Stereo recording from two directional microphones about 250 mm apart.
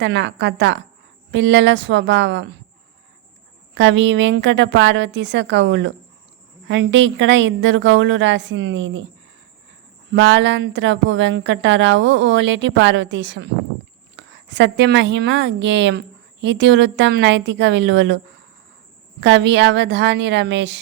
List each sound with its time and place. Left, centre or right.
0.0 s a woman's voice: right
3.8 s a woman's voice: right
10.1 s a woman's voice: right
19.2 s a woman's voice: right